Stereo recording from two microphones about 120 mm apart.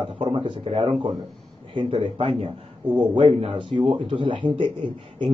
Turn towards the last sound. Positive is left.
turn(degrees=-45)  # may be behind; listen again after turning